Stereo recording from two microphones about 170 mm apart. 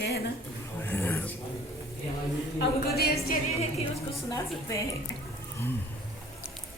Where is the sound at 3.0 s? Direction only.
65° left (ahead or behind).